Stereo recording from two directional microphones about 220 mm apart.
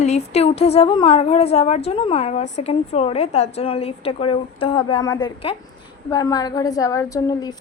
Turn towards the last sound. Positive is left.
turn(degrees=15)  # may be behind; listen again after turning